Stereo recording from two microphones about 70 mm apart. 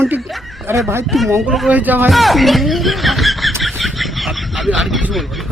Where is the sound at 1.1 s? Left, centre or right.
Centre.